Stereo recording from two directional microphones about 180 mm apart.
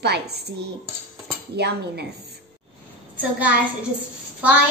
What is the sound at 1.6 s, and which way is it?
Cutlery, 65° right (ahead or behind).